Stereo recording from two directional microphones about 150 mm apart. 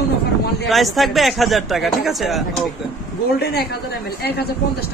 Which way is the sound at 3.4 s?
90° left.